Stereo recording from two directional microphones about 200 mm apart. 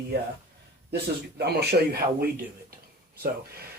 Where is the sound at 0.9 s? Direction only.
55° right (ahead or behind).